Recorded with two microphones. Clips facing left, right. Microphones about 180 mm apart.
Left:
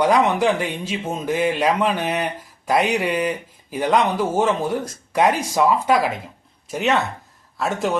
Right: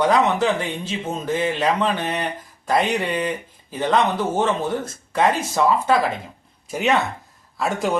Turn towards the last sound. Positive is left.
turn(degrees=0)  # may be behind; listen again after turning